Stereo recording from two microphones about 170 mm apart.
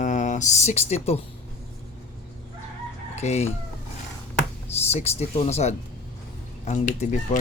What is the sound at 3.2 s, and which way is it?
Speech, 40° left (ahead or behind).